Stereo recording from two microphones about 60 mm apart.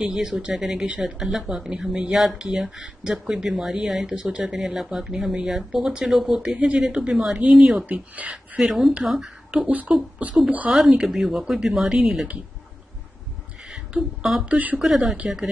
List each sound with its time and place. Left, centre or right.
0.0 s speech: centre
0.8 s speech: centre
1.2 s speech: centre
8.6 s speech: centre
9.7 s speech: right
10.7 s speech: centre
14.4 s speech: right
14.8 s speech: centre